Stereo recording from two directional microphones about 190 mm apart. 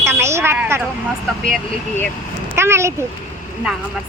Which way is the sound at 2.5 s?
15° right (ahead or behind).